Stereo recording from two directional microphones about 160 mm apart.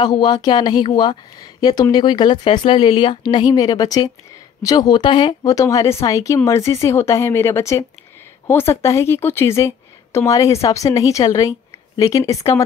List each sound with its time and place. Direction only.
0.0 s speech: 25° left (ahead or behind)